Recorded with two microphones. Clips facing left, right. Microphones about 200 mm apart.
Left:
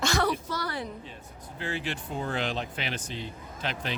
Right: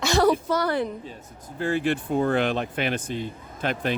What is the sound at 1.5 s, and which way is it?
Speech, 50° right (ahead or behind).